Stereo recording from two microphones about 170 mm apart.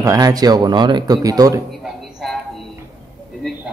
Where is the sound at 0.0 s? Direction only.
20° right (ahead or behind).